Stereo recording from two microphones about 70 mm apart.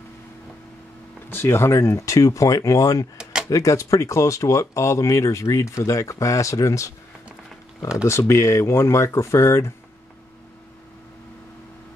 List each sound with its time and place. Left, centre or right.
1.3 s speech: left
8.1 s speech: left